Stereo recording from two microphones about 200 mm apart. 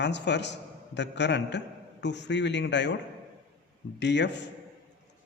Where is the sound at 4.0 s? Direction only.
60° left (ahead or behind).